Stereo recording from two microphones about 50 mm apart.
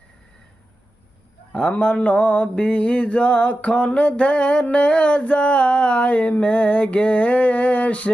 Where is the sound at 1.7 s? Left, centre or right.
Left.